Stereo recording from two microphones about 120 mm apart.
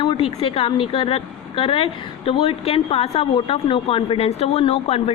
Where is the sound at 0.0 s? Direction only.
50° left (ahead or behind).